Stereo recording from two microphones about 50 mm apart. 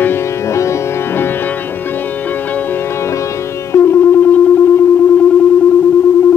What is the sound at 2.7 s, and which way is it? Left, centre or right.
Sitar, left.